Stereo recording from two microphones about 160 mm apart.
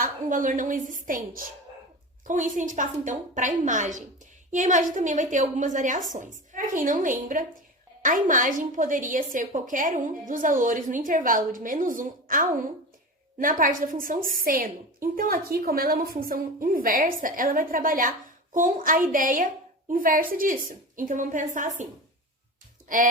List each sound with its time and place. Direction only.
0.0 s a woman's voice: 55° right (ahead or behind)
22.9 s a woman's voice: 60° right (ahead or behind)